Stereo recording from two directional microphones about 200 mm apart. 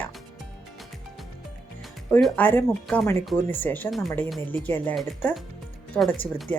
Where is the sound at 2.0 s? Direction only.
5° left (ahead or behind).